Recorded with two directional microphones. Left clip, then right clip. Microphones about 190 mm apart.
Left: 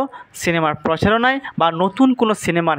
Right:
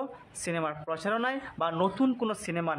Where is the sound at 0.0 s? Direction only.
40° left (ahead or behind).